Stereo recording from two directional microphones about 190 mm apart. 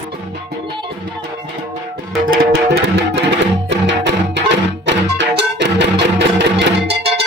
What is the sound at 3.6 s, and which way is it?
Music, 65° right (ahead or behind).